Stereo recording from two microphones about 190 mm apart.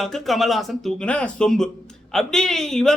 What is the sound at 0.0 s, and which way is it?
A man's voice, centre (ahead or behind).